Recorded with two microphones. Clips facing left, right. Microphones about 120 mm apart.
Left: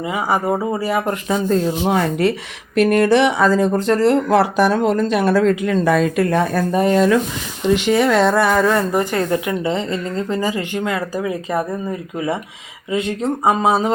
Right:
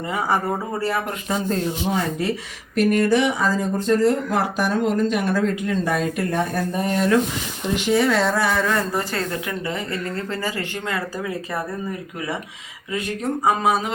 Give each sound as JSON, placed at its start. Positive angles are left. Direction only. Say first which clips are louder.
{"t": 0.1, "sound": "speech", "louder": "left 3 dB", "side_deg": 10}
{"t": 1.8, "sound": "speech", "louder": "left 6 dB", "side_deg": 70}
{"t": 7.8, "sound": "a sound", "louder": "left 2 dB", "side_deg": 65}
{"t": 9.0, "sound": "a woman's voice", "louder": "left 7 dB", "side_deg": 20}